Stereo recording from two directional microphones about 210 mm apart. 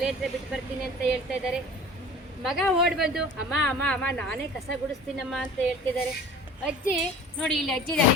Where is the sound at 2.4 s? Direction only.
Centre (ahead or behind).